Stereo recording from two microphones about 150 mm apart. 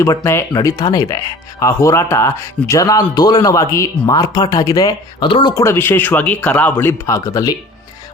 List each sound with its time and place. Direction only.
0.0 s speech: 20° left (ahead or behind)
5.6 s speech: 15° left (ahead or behind)